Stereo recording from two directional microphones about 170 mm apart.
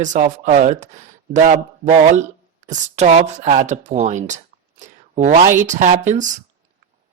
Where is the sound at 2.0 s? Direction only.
45° right (ahead or behind).